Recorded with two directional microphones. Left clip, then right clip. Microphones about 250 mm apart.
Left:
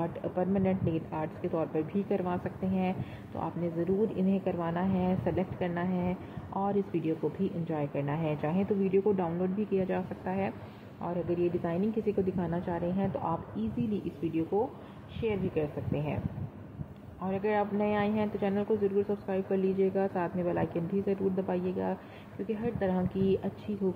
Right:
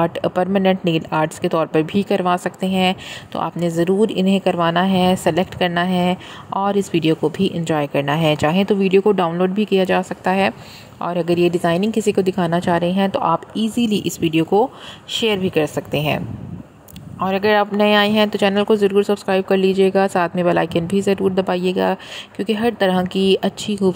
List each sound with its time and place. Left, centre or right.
0.0 s speech: right
17.2 s speech: right
23.8 s speech: right